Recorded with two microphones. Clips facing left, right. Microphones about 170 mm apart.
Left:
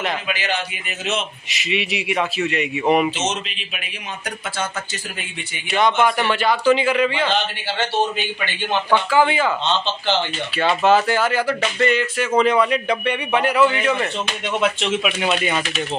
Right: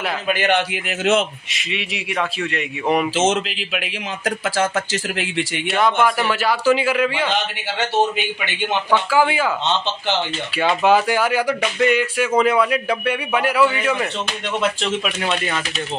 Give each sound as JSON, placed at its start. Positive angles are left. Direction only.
{"t": 0.3, "sound": "a man's voice", "side_deg": -60}
{"t": 1.5, "sound": "a man's voice", "side_deg": 0}
{"t": 3.3, "sound": "speech", "side_deg": -90}
{"t": 5.7, "sound": "a man's voice", "side_deg": 0}
{"t": 8.9, "sound": "a man's voice", "side_deg": -10}
{"t": 14.6, "sound": "speech", "side_deg": 5}